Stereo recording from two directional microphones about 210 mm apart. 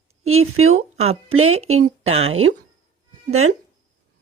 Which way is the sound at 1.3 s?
90° right.